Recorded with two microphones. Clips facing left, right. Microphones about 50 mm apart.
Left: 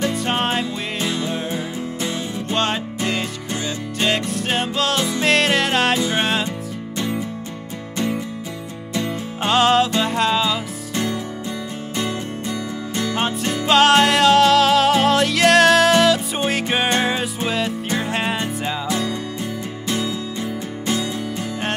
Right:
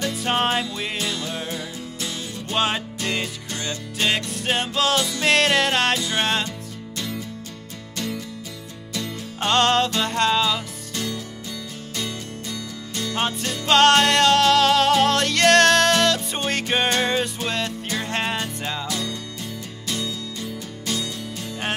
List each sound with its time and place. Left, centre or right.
0.1 s music: centre
0.9 s music: centre
2.5 s music: centre
5.9 s music: centre
7.0 s music: left
9.4 s music: centre
12.0 s music: left
13.1 s music: centre
18.9 s music: left